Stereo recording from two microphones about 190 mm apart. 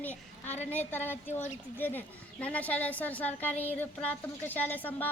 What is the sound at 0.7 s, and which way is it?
Speech, 10° left (ahead or behind).